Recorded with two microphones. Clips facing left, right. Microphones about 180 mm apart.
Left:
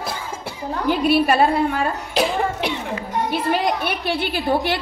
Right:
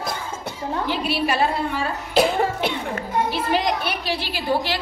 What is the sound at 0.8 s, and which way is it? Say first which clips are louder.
Speech: left 8 dB; 50° left (ahead or behind).